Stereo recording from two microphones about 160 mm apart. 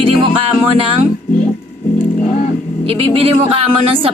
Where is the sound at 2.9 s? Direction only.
35° right (ahead or behind).